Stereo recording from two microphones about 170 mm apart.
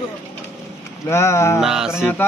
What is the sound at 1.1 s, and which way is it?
Speech, 15° left (ahead or behind).